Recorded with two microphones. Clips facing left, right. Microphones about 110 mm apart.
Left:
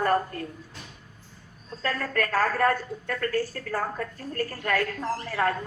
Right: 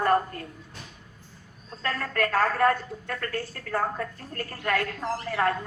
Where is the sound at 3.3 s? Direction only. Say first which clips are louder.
Left 2 dB; 35° left (ahead or behind).